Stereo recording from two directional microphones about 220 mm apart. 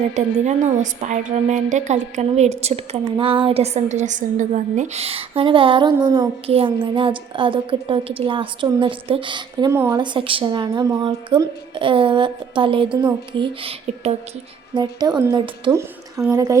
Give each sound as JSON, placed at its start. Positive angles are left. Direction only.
{"t": 0.1, "sound": "a woman's voice", "side_deg": -30}